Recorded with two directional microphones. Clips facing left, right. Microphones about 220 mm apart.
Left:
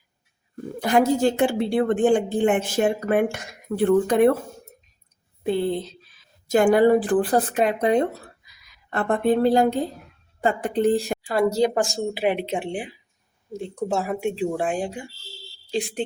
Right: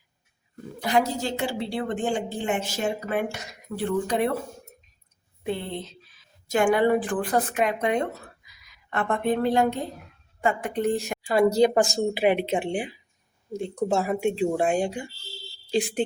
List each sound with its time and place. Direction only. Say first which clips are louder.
0.5 s a woman's voice: left 4 dB; 50° left (ahead or behind)
5.4 s speech: left 7 dB; 35° left (ahead or behind)
11.3 s speech: right 2 dB; centre (ahead or behind)